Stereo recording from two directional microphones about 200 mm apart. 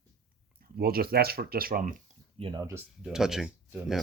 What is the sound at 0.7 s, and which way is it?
Speech, 50° right (ahead or behind).